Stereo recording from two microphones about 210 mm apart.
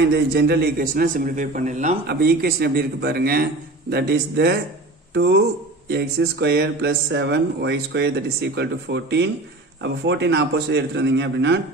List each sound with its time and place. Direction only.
0.0 s a man's voice: 50° right (ahead or behind); by 2.0 s 35° right (ahead or behind)
2.0 s a man's voice: 45° right (ahead or behind)